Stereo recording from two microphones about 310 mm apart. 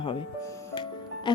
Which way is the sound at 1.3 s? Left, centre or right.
Centre.